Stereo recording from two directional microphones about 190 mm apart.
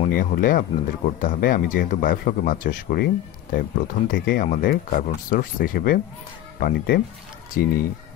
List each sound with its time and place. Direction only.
0.1 s speech: 50° left (ahead or behind)